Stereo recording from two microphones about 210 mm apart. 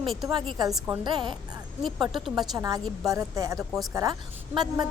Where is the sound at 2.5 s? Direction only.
15° right (ahead or behind).